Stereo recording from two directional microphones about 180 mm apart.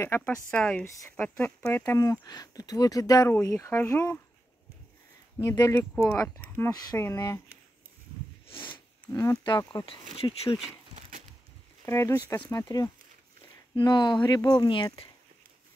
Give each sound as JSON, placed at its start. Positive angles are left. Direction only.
{"t": 0.0, "sound": "speech", "side_deg": 10}
{"t": 5.4, "sound": "speech", "side_deg": 15}
{"t": 8.5, "sound": "a sound", "side_deg": 25}
{"t": 9.2, "sound": "speech", "side_deg": 20}
{"t": 11.0, "sound": "splinter", "side_deg": -45}
{"t": 11.8, "sound": "speech", "side_deg": 15}